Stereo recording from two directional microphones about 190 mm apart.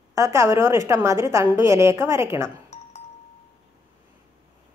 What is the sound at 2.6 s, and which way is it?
Doorbell, 35° left (ahead or behind).